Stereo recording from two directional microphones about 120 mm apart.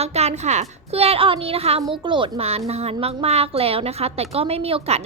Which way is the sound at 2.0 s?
40° right (ahead or behind).